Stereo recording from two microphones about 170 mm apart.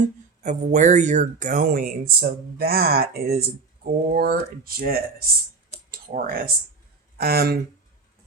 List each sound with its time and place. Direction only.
0.4 s speech: 45° right (ahead or behind); by 7.6 s 65° right (ahead or behind)